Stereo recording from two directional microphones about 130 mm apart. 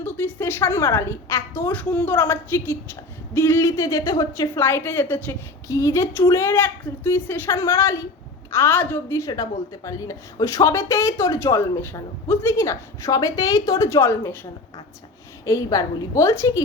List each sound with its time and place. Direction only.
0.0 s a woman's voice: 15° left (ahead or behind)
15.4 s a woman's voice: 25° left (ahead or behind)